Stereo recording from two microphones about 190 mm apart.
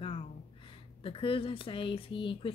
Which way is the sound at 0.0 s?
30° left (ahead or behind).